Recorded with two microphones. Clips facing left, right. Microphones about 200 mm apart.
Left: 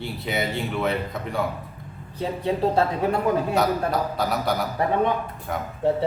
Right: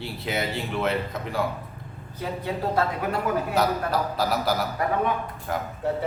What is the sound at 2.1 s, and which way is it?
Speech, 25° left (ahead or behind).